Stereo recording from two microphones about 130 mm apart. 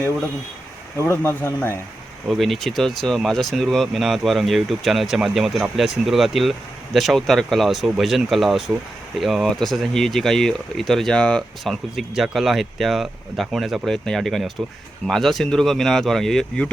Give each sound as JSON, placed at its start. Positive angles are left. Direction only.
{"t": 0.9, "sound": "speech", "side_deg": 20}
{"t": 2.3, "sound": "speech", "side_deg": 0}